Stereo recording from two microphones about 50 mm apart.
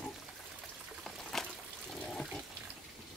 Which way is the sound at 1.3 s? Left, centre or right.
Centre.